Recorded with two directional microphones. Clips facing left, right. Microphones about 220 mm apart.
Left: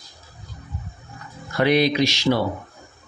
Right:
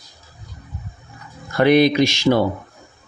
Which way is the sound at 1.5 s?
50° right (ahead or behind).